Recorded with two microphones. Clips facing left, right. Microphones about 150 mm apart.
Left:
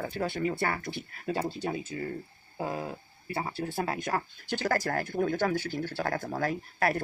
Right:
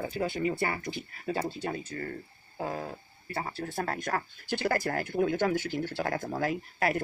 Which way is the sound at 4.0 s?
5° left (ahead or behind).